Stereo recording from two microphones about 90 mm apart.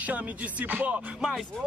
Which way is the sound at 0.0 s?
15° right (ahead or behind).